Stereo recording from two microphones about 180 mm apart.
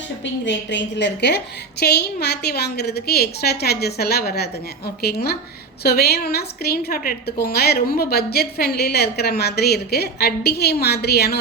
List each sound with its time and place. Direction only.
0.4 s a woman's voice: 80° left; by 11.3 s 65° left (ahead or behind)